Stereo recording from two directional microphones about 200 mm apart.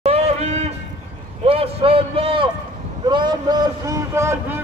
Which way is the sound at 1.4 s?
30° right (ahead or behind).